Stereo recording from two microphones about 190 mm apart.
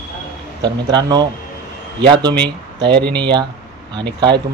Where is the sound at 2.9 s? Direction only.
60° right (ahead or behind).